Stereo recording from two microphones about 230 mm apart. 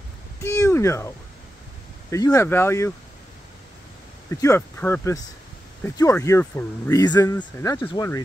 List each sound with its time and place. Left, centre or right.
0.4 s a sound: centre
2.0 s speech: centre
4.3 s speech: centre